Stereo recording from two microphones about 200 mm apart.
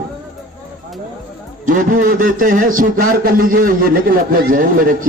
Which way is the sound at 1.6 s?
40° right (ahead or behind).